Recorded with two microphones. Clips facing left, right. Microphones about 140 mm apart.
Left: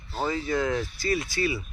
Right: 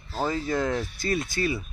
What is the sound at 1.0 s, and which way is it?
Speech, 50° right (ahead or behind).